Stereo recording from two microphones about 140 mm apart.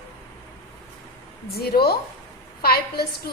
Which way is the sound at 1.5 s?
90° left.